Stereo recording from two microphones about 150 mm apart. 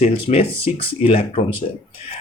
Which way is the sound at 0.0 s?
40° left (ahead or behind).